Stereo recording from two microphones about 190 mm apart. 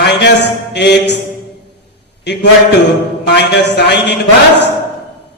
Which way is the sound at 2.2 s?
65° left (ahead or behind).